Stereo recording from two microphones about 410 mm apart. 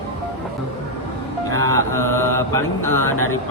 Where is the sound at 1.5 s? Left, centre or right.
Right.